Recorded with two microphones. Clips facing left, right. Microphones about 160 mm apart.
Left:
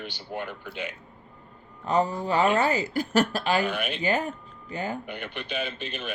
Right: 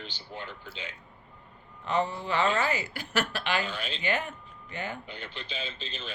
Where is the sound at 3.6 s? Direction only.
60° left (ahead or behind).